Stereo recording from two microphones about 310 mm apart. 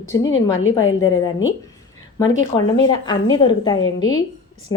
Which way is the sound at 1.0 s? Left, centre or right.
Centre.